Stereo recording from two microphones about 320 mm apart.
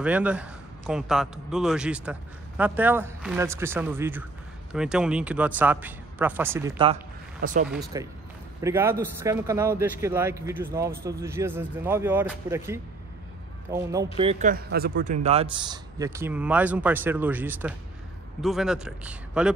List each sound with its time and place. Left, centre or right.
0.0 s a man's voice: centre; by 15.1 s right
15.2 s a man's voice: centre